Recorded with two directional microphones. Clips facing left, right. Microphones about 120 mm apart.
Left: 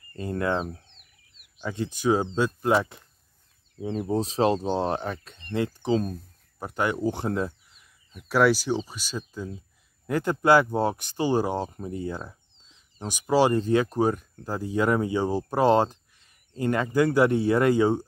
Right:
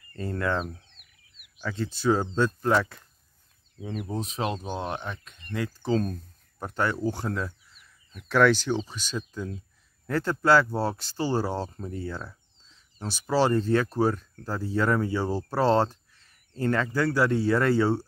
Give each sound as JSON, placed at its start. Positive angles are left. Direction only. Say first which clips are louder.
{"t": 0.1, "sound": "chicken", "louder": "left 2 dB", "side_deg": 20}
{"t": 2.3, "sound": "speech", "louder": "left 1 dB", "side_deg": 10}
{"t": 3.8, "sound": "speech", "louder": "left 6 dB", "side_deg": 30}
{"t": 8.3, "sound": "speech", "louder": "even", "side_deg": 10}